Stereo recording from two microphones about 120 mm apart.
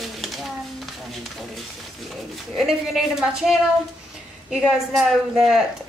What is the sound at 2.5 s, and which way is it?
A woman's voice, centre (ahead or behind).